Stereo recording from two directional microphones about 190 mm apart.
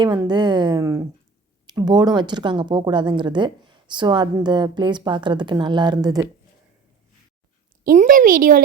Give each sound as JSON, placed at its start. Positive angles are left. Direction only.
{"t": 0.0, "sound": "speech", "side_deg": -20}
{"t": 7.9, "sound": "a woman's voice", "side_deg": -45}